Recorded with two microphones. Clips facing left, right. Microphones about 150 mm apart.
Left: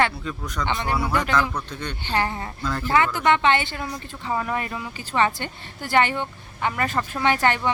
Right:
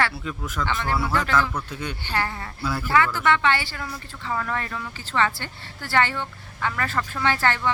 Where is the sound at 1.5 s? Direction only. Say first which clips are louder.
Even; 10° right (ahead or behind).